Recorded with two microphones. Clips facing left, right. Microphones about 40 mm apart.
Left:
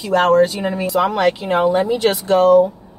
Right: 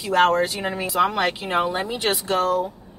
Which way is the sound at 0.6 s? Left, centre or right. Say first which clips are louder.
Left 4 dB; centre.